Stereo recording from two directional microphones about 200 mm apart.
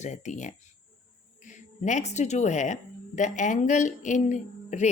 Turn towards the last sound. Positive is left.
turn(degrees=35)  # may be behind; listen again after turning